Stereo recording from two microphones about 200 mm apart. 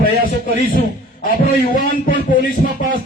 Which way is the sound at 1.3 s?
45° left (ahead or behind).